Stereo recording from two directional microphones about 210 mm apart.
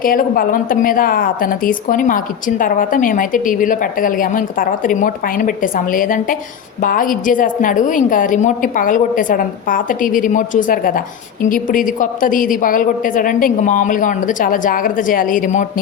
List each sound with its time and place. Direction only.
0.0 s a woman's voice: 40° left (ahead or behind)